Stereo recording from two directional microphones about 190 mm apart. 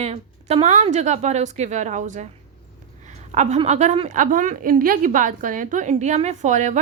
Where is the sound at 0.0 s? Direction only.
35° right (ahead or behind).